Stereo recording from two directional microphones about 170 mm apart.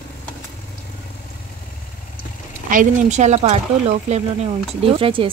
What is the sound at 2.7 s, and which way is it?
Speech, 45° right (ahead or behind).